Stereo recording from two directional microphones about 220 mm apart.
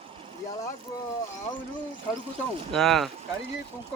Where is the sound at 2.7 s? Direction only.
Centre (ahead or behind).